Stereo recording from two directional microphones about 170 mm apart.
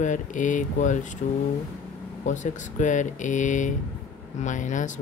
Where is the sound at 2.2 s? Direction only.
45° left (ahead or behind).